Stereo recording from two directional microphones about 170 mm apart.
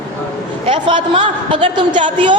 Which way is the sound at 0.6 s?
30° right (ahead or behind).